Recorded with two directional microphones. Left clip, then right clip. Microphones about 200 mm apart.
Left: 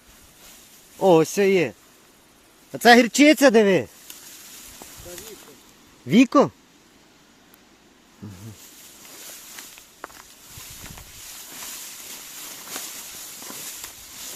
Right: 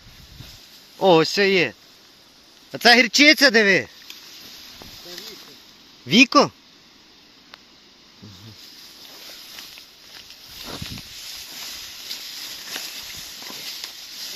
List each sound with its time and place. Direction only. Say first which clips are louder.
1.0 s speech: right 1 dB; 5° left (ahead or behind)
2.8 s speech: right 1 dB; 20° left (ahead or behind)
6.1 s speech: right 2 dB; 15° left (ahead or behind)
13.4 s walk: right 5 dB; 5° left (ahead or behind)